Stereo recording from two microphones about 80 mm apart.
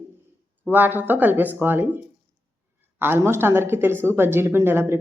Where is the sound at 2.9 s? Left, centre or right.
Right.